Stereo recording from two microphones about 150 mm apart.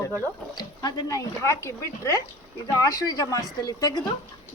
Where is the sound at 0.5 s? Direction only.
25° left (ahead or behind).